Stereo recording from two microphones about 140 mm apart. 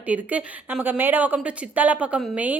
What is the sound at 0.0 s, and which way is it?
A woman's voice, 10° right (ahead or behind).